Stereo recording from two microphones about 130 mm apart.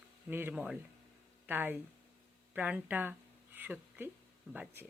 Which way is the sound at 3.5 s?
15° right (ahead or behind).